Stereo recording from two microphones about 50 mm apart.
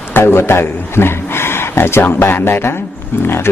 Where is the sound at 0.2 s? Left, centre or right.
Left.